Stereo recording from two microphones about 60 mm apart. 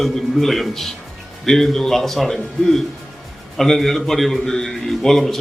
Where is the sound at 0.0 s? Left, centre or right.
Centre.